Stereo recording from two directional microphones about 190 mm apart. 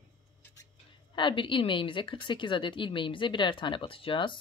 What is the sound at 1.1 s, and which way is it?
A woman's voice, 25° left (ahead or behind).